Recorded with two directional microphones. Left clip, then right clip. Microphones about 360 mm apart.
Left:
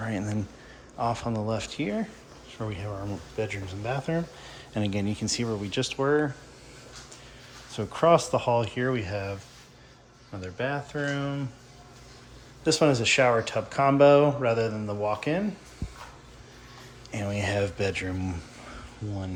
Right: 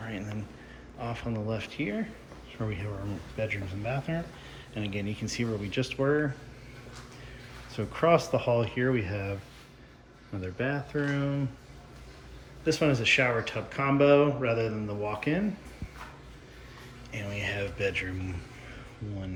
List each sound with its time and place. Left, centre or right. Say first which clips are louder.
0.0 s a sound: left 6 dB; left
0.9 s speech: left 7 dB; centre
7.7 s speech: left 3 dB; centre
10.4 s speech: left 2 dB; centre
12.6 s speech: left 3 dB; centre
17.1 s speech: left 4 dB; centre